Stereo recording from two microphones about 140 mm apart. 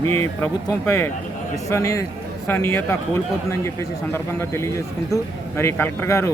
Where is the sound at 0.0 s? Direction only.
20° left (ahead or behind).